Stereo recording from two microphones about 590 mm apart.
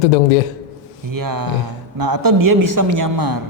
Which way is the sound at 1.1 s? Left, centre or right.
Right.